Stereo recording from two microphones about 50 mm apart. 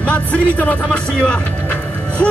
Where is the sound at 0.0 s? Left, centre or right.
Left.